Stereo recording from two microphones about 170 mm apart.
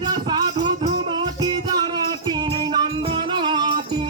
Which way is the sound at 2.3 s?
30° right (ahead or behind).